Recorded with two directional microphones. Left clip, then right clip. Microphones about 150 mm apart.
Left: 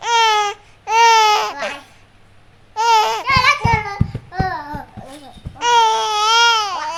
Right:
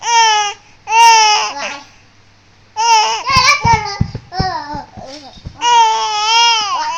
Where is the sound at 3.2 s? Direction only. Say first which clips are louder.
Right 4 dB; 15° right (ahead or behind).